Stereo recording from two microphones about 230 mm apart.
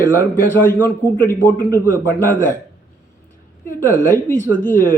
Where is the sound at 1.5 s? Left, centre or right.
Centre.